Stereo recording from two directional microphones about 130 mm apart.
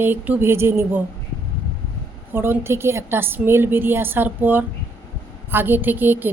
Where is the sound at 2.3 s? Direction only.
15° right (ahead or behind).